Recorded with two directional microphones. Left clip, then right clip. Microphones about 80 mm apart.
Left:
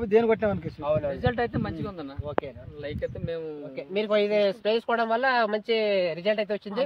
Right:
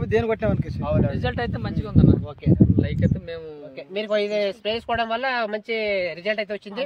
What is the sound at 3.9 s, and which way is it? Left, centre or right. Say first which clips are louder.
Speech: right 1 dB; left.